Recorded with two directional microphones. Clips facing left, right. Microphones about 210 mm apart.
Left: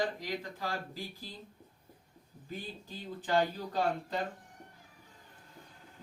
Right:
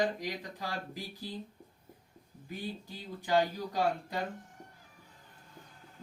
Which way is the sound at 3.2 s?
15° right (ahead or behind).